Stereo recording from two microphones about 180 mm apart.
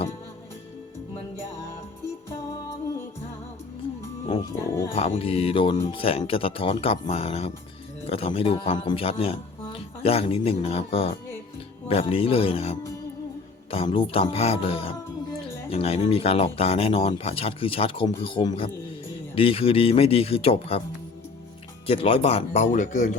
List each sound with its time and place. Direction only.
1.4 s music: 15° left (ahead or behind)
4.9 s speech: 35° left (ahead or behind)
21.8 s speech: 30° left (ahead or behind)